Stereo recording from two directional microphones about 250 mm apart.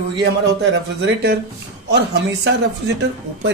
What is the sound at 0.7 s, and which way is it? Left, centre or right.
Speech, right.